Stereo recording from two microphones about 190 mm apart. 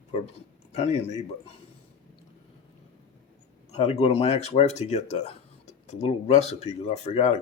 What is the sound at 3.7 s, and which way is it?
Speech, 35° left (ahead or behind).